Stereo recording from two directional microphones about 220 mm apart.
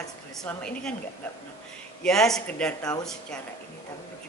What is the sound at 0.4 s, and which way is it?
Speech, 5° left (ahead or behind).